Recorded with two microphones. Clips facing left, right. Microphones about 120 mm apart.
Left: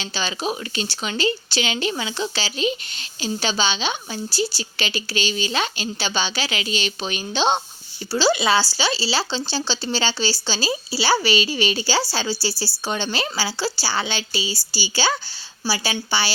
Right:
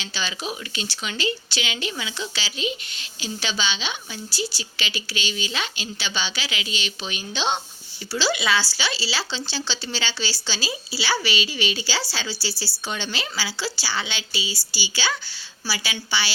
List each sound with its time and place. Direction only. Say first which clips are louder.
0.0 s speech: left 5 dB; 35° left (ahead or behind)